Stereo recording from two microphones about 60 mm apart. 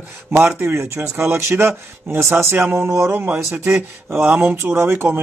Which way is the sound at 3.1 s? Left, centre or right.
Right.